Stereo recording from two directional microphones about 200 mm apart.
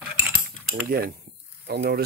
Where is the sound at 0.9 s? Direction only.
45° right (ahead or behind).